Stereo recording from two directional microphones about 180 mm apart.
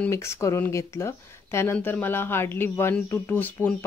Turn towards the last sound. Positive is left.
turn(degrees=10)  # may be behind; listen again after turning